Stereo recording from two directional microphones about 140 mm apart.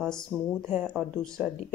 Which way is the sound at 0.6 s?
15° right (ahead or behind).